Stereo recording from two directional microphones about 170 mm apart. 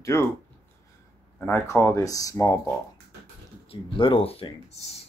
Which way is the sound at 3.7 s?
30° left (ahead or behind).